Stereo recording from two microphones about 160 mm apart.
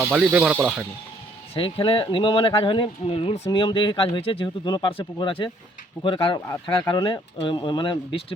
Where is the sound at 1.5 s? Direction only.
35° left (ahead or behind).